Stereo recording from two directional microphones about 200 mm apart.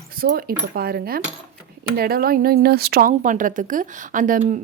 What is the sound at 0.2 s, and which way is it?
Speech, 50° right (ahead or behind).